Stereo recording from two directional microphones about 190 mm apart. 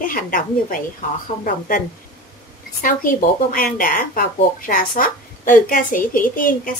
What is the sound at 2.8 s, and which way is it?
Speech, 45° left (ahead or behind).